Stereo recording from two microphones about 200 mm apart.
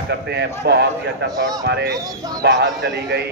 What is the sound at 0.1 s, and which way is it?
A man's voice, 55° right (ahead or behind).